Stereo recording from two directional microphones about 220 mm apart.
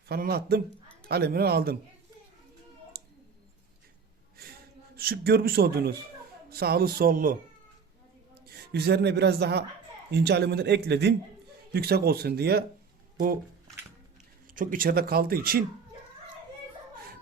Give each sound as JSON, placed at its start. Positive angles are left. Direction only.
{"t": 0.1, "sound": "speech", "side_deg": -45}
{"t": 2.9, "sound": "clicking", "side_deg": -45}
{"t": 4.9, "sound": "speech", "side_deg": -45}
{"t": 8.4, "sound": "a woman's voice", "side_deg": -45}
{"t": 14.4, "sound": "speech", "side_deg": -40}